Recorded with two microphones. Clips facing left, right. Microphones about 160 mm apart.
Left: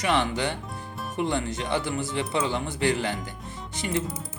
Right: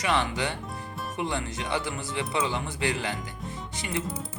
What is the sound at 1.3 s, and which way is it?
Speech, 50° left (ahead or behind).